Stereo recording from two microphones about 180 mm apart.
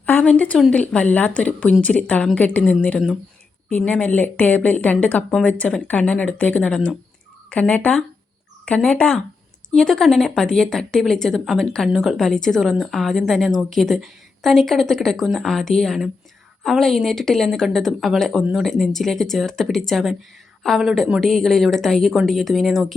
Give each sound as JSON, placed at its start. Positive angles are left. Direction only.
{"t": 0.0, "sound": "a woman's voice", "side_deg": 10}